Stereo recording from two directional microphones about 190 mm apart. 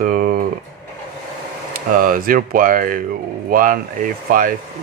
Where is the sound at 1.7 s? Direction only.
50° right (ahead or behind).